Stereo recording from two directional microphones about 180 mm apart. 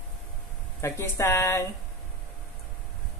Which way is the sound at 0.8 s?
15° left (ahead or behind).